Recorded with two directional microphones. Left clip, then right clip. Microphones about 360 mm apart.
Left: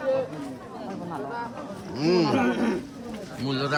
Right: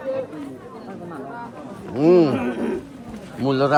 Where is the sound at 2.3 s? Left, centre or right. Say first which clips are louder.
Even; left.